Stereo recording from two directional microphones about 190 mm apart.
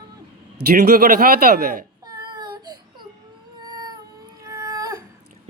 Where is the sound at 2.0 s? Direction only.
20° right (ahead or behind).